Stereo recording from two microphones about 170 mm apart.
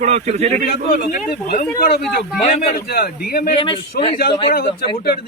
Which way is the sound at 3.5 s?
30° left (ahead or behind).